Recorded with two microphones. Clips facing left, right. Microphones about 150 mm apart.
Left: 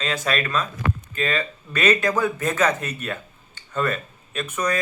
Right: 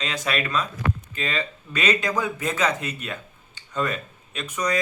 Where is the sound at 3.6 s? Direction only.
15° right (ahead or behind).